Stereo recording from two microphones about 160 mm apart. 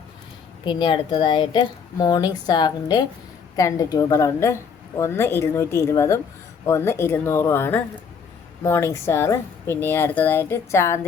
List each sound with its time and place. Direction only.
0.6 s speech: 30° left (ahead or behind)